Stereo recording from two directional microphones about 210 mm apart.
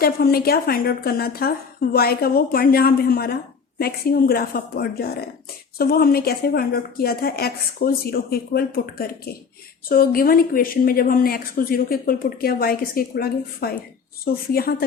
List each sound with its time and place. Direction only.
0.0 s a woman's voice: 45° left (ahead or behind)